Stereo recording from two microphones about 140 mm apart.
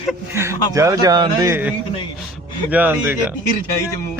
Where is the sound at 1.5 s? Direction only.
10° right (ahead or behind).